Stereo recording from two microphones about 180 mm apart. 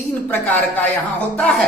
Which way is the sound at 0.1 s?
10° left (ahead or behind).